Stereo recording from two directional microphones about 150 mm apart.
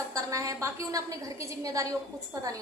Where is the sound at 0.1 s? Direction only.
20° right (ahead or behind).